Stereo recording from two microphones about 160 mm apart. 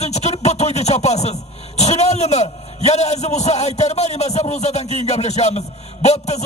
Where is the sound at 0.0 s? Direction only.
45° left (ahead or behind).